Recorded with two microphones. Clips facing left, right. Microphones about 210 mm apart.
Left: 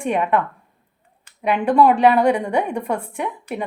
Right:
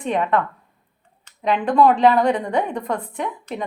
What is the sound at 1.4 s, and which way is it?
A woman's voice, 10° left (ahead or behind).